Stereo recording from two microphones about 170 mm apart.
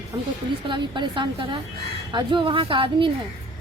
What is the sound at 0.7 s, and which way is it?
A woman's voice, 30° right (ahead or behind).